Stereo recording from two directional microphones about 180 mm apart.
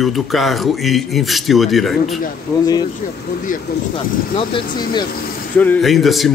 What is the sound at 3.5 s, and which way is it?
Speech, 50° left (ahead or behind).